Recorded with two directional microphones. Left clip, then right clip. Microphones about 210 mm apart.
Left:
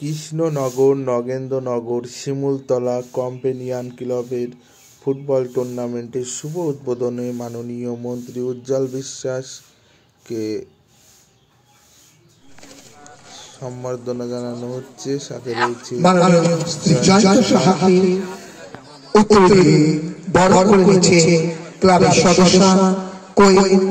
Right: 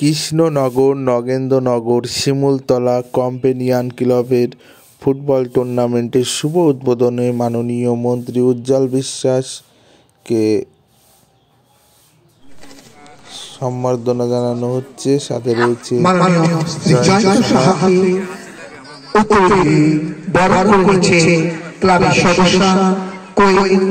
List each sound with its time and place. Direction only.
0.0 s speech: 50° right (ahead or behind)
13.3 s speech: 35° right (ahead or behind)
16.0 s a man's voice: 50° left (ahead or behind)
18.9 s a sound: 20° left (ahead or behind)
19.2 s a man's voice: 50° left (ahead or behind)